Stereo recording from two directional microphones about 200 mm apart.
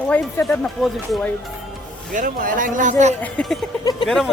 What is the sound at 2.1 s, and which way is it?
Speech, 45° right (ahead or behind).